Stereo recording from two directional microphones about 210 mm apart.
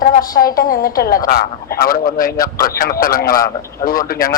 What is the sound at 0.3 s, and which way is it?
A woman's voice, 45° left (ahead or behind).